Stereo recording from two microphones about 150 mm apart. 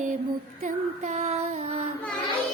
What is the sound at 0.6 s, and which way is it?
Female singing, 50° right (ahead or behind).